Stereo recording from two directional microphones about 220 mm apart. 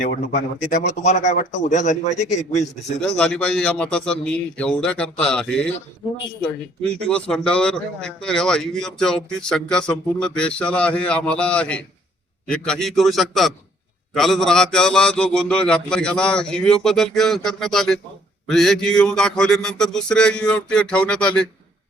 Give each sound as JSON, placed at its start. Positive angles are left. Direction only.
{"t": 0.0, "sound": "a man's voice", "side_deg": 35}
{"t": 3.0, "sound": "a man's voice", "side_deg": 5}